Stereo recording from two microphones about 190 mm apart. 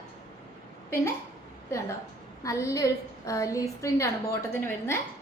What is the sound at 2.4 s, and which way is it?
A woman's voice, 15° left (ahead or behind).